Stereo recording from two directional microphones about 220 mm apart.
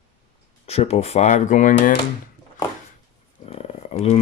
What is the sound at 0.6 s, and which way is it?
Speech, 30° left (ahead or behind).